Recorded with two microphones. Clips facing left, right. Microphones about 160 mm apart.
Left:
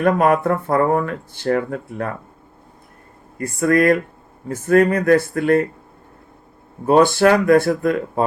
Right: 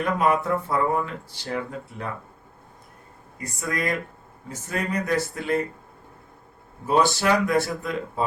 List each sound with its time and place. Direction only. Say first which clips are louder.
0.0 s speech: left 7 dB; 55° left (ahead or behind)
3.3 s speech: left 13 dB; 55° left (ahead or behind)
6.8 s speech: left 8 dB; 55° left (ahead or behind)